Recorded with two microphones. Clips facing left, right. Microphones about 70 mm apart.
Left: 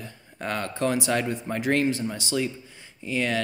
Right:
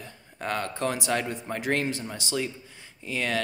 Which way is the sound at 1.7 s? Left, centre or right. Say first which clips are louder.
Left 5 dB; right.